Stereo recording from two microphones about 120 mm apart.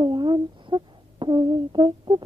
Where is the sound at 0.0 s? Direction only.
40° right (ahead or behind).